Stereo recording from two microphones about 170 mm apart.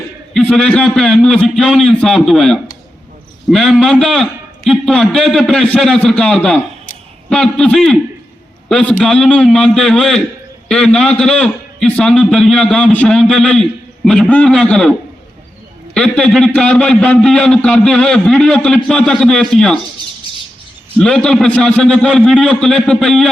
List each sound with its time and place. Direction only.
0.3 s a man's voice: 5° left (ahead or behind)
16.0 s a man's voice: 5° left (ahead or behind)
21.0 s a man's voice: 5° left (ahead or behind)